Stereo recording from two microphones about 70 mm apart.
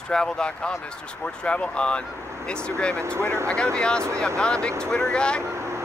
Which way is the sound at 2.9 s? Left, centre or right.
Right.